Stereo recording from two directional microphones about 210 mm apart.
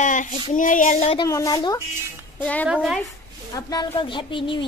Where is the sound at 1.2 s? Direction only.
15° left (ahead or behind).